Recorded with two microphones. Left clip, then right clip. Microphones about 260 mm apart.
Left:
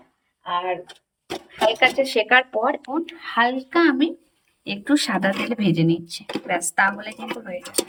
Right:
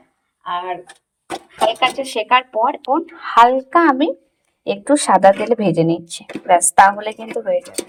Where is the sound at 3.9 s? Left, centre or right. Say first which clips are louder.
Right 6 dB; centre.